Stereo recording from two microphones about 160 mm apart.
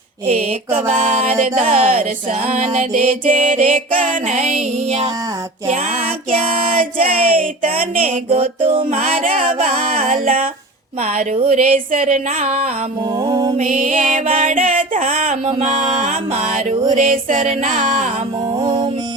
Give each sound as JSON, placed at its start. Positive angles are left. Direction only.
{"t": 0.3, "sound": "music", "side_deg": -45}
{"t": 6.3, "sound": "speech", "side_deg": -35}
{"t": 7.0, "sound": "music", "side_deg": -55}
{"t": 7.8, "sound": "speech", "side_deg": -40}
{"t": 8.9, "sound": "music", "side_deg": -55}
{"t": 9.8, "sound": "speech", "side_deg": -40}
{"t": 11.9, "sound": "music", "side_deg": -55}
{"t": 13.2, "sound": "music", "side_deg": -25}
{"t": 13.6, "sound": "music", "side_deg": -50}
{"t": 18.6, "sound": "music", "side_deg": -25}